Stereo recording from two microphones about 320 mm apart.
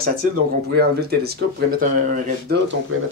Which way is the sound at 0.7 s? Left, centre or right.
Right.